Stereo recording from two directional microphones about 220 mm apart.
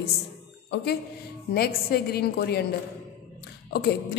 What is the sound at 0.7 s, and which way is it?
A woman's voice, 45° left (ahead or behind).